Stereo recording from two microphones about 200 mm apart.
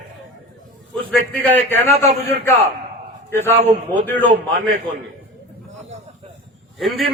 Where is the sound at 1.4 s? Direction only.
10° left (ahead or behind).